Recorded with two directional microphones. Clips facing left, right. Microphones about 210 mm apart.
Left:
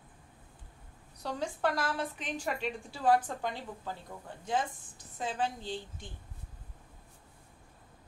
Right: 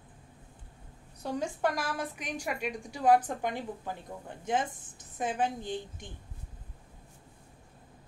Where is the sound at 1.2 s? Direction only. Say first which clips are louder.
Right 2 dB; 15° right (ahead or behind).